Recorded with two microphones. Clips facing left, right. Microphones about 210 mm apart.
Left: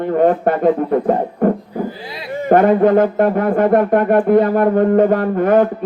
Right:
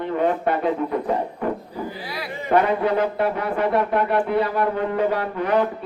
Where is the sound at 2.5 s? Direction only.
50° left (ahead or behind).